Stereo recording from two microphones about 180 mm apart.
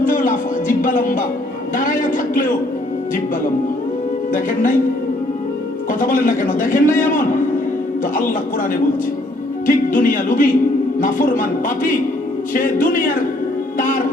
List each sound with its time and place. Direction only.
0.0 s music: 50° left (ahead or behind)
1.7 s a man's voice: 50° left (ahead or behind)
4.3 s a man's voice: 50° left (ahead or behind)
5.9 s a man's voice: 50° left (ahead or behind)
9.6 s a man's voice: 50° left (ahead or behind)
13.7 s music: 50° left (ahead or behind)